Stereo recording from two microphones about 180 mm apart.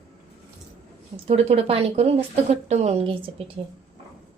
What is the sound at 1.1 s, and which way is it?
A woman's voice, 35° right (ahead or behind).